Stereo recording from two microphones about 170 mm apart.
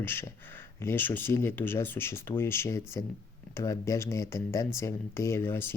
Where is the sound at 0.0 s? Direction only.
15° left (ahead or behind).